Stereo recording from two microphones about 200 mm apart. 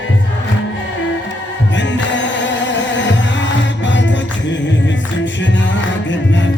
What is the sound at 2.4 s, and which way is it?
Music, 65° left (ahead or behind).